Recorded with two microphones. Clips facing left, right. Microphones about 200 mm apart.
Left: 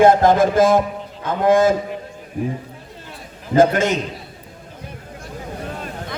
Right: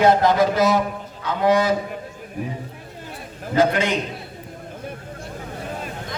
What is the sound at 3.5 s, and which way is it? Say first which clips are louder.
Speech: left 4 dB; 45° left (ahead or behind).